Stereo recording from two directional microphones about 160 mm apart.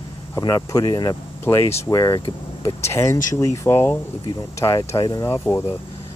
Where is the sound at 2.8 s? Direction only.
15° left (ahead or behind).